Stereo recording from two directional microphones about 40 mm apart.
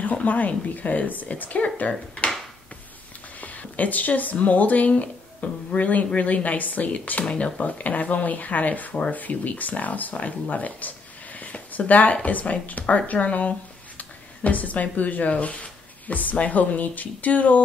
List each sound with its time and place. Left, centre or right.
0.0 s speech: left
3.3 s speech: left